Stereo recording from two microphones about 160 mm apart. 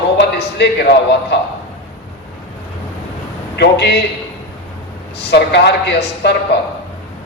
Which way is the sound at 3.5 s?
90° left.